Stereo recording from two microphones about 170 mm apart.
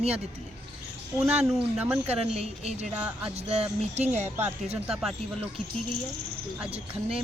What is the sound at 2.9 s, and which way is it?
Speech, 10° right (ahead or behind).